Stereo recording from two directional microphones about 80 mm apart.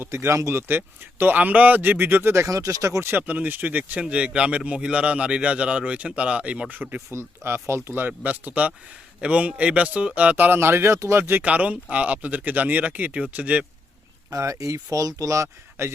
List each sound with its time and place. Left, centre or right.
0.0 s speech: right
0.7 s speech: right
3.1 s a man's voice: right
7.1 s speech: right
11.4 s a man's voice: centre
14.3 s speech: right